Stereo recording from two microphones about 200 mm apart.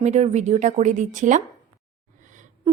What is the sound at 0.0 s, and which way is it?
A woman's voice, 35° right (ahead or behind).